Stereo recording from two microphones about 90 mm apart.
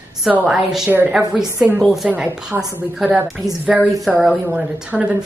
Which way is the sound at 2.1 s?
15° right (ahead or behind).